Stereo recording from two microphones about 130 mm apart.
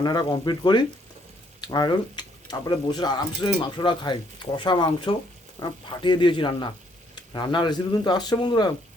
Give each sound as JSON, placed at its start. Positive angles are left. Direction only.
{"t": 0.0, "sound": "speech", "side_deg": 30}